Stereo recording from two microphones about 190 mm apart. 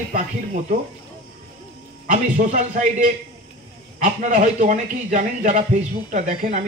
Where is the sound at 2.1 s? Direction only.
40° right (ahead or behind).